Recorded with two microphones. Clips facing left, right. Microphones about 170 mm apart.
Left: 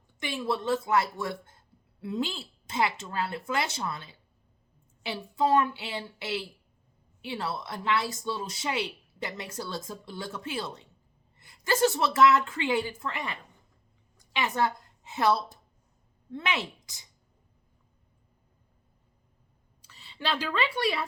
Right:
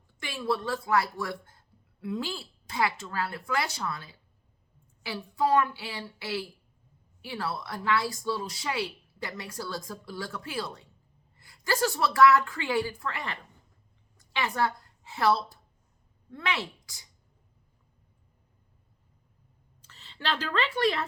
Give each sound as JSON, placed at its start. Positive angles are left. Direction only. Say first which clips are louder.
{"t": 0.2, "sound": "a woman's voice", "louder": "even", "side_deg": 20}
{"t": 19.8, "sound": "a woman's voice", "louder": "left 1 dB", "side_deg": 10}